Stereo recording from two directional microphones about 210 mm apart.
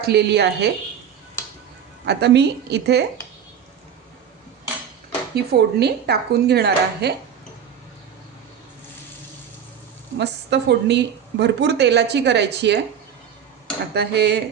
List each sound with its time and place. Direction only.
0.0 s speech: 50° right (ahead or behind)
2.0 s speech: 55° right (ahead or behind)
5.3 s speech: 50° right (ahead or behind)
10.2 s a woman's voice: 55° right (ahead or behind)
13.9 s speech: 50° right (ahead or behind)